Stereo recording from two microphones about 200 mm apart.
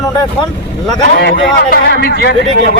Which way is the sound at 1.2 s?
55° left (ahead or behind).